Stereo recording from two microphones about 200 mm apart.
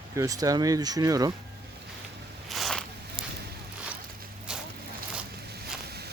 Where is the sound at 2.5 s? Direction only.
Centre (ahead or behind).